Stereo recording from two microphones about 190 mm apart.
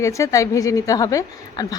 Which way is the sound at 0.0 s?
15° left (ahead or behind).